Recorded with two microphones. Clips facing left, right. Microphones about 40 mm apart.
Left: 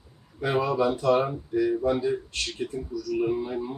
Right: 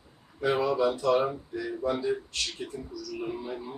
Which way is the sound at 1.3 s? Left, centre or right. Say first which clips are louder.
Left 8 dB; centre.